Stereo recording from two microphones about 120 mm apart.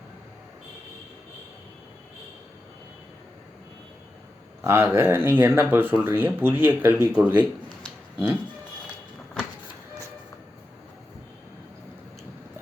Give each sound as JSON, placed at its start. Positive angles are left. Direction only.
{"t": 4.6, "sound": "speech", "side_deg": -20}